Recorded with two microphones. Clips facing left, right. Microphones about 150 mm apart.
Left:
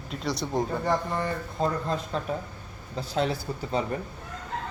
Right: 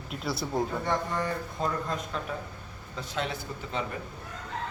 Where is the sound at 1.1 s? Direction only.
30° left (ahead or behind).